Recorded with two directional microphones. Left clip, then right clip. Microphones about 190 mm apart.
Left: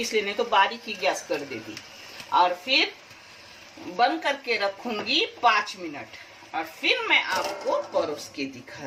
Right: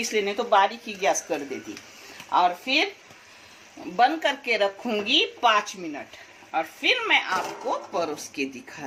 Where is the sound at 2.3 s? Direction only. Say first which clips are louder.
Even; 55° right (ahead or behind).